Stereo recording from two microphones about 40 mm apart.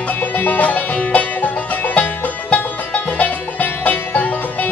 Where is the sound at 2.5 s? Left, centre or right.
Left.